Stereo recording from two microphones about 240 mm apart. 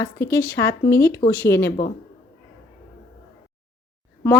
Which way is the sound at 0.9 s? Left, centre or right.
Left.